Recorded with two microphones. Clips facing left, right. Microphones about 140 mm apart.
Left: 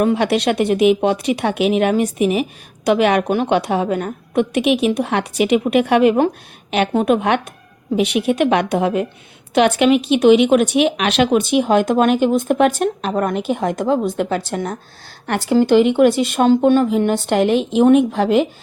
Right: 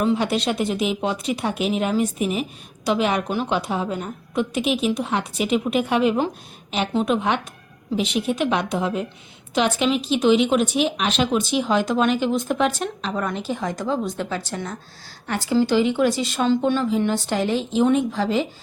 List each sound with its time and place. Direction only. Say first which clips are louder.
0.0 s speech: left 5 dB; 70° left (ahead or behind)